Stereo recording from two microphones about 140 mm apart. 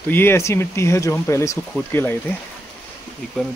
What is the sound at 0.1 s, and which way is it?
Speech, 15° left (ahead or behind).